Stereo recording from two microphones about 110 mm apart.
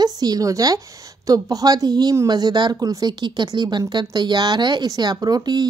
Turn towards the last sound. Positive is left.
turn(degrees=-40)  # may be behind; listen again after turning